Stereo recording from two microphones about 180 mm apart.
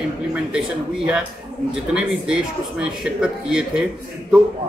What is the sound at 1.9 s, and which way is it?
Speech, 5° right (ahead or behind).